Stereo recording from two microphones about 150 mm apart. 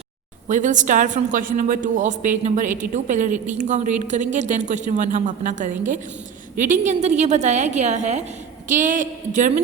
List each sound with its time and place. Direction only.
0.4 s a man's voice: 55° right (ahead or behind)